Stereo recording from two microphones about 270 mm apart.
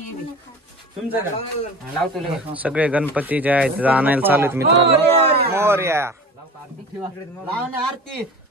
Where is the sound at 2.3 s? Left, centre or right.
Centre.